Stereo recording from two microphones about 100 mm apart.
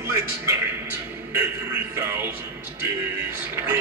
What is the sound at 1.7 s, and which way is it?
Speech, 20° right (ahead or behind).